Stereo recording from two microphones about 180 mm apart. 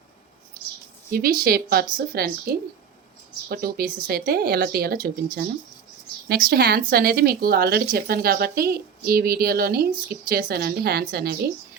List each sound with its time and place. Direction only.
1.1 s speech: 55° right (ahead or behind)